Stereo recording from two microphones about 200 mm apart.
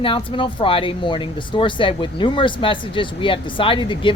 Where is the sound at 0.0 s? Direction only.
25° left (ahead or behind).